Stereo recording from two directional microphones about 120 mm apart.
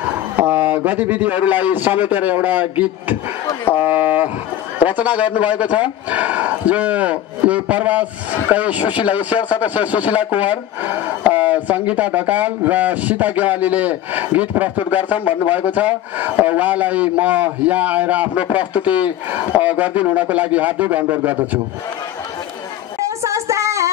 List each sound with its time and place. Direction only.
0.4 s a man's voice: 15° right (ahead or behind)
23.0 s child singing: 25° right (ahead or behind)